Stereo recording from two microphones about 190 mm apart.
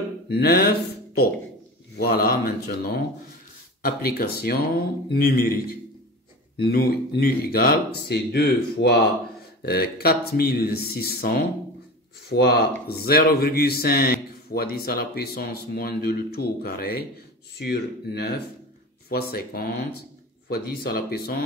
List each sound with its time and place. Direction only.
0.3 s a man's voice: 55° left (ahead or behind)
6.7 s a man's voice: 50° left (ahead or behind)